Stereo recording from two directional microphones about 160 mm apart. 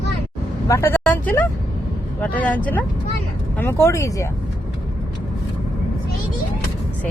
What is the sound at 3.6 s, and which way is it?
Speech, 15° left (ahead or behind).